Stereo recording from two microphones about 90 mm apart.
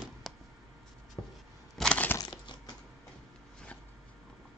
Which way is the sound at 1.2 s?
30° left (ahead or behind).